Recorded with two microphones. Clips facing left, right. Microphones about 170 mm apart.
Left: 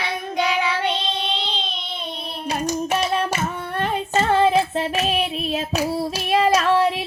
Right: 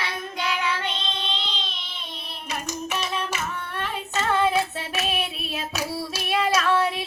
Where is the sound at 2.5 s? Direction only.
35° left (ahead or behind).